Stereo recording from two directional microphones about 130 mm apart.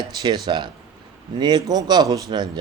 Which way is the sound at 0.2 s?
35° right (ahead or behind).